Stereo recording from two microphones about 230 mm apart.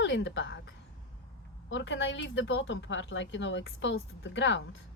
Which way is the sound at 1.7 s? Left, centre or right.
Left.